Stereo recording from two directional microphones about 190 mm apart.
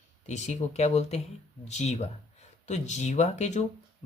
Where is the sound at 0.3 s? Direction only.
35° left (ahead or behind).